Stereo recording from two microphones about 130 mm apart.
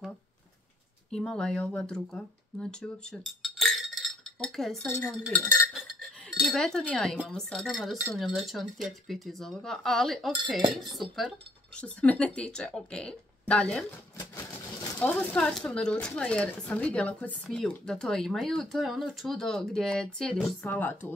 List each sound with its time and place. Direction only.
1.1 s speech: 5° left (ahead or behind)
4.8 s speech: 15° left (ahead or behind)
5.7 s a sound: centre (ahead or behind)
6.4 s speech: 5° left (ahead or behind)
11.8 s speech: 10° left (ahead or behind)
15.0 s speech: 10° left (ahead or behind)
20.6 s speech: 15° left (ahead or behind)